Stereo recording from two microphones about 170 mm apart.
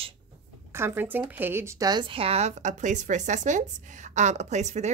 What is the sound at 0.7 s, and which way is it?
Speech, 15° right (ahead or behind).